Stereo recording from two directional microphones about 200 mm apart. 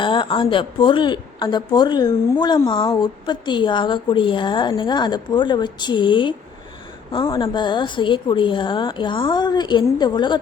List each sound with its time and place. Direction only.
0.0 s speech: 25° left (ahead or behind)